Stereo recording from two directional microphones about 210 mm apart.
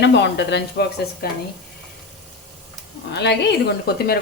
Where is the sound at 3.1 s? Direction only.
55° left (ahead or behind).